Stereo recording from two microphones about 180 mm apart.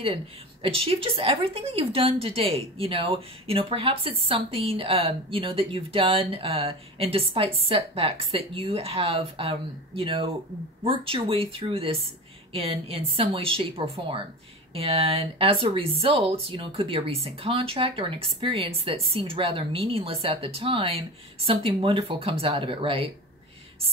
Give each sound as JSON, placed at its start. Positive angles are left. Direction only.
{"t": 0.0, "sound": "a woman's voice", "side_deg": -30}